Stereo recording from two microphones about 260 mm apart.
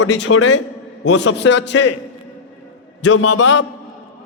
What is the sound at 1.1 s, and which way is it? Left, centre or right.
Speech, left.